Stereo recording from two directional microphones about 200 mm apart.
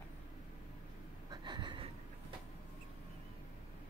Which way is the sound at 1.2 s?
20° right (ahead or behind).